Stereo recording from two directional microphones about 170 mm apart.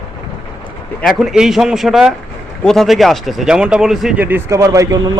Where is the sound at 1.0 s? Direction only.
Centre (ahead or behind).